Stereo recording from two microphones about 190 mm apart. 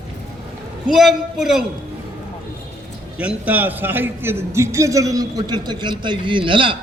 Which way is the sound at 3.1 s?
5° right (ahead or behind).